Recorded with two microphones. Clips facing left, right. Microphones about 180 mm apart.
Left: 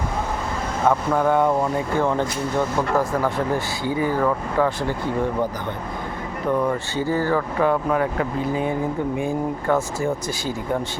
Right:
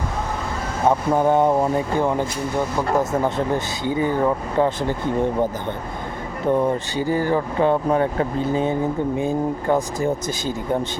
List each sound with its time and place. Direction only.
0.9 s speech: 20° right (ahead or behind)
6.5 s speech: 25° right (ahead or behind)
6.9 s speech: 15° right (ahead or behind)